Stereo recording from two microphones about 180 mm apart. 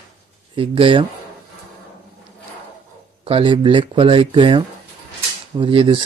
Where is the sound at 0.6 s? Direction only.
30° right (ahead or behind).